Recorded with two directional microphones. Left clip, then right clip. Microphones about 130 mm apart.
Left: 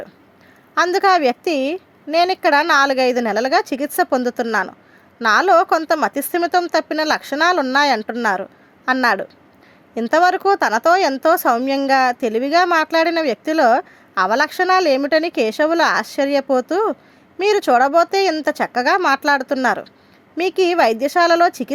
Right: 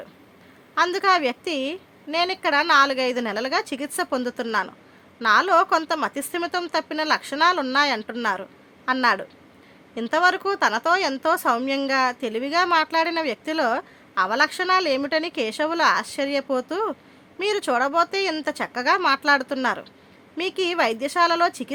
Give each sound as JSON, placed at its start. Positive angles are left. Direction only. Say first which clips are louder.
{"t": 0.8, "sound": "a woman's voice", "louder": "left 5 dB", "side_deg": 45}
{"t": 5.2, "sound": "a woman's voice", "louder": "left 5 dB", "side_deg": 45}
{"t": 11.9, "sound": "a woman's voice", "louder": "left 8 dB", "side_deg": 45}